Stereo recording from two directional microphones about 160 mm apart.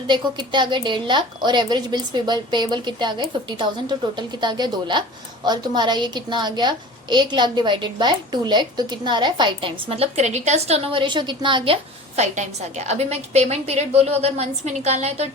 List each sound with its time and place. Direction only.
0.1 s a woman's voice: 30° right (ahead or behind)